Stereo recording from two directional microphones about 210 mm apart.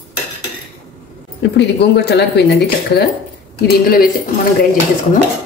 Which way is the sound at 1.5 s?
50° left (ahead or behind).